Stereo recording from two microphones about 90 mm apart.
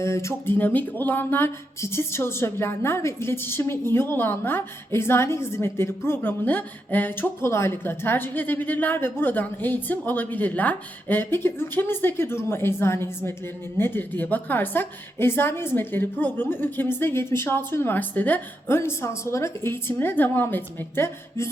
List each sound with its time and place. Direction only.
0.0 s speech: 30° left (ahead or behind)
0.5 s speech: 20° left (ahead or behind)